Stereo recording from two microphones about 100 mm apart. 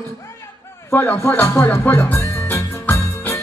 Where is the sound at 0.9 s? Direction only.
20° left (ahead or behind).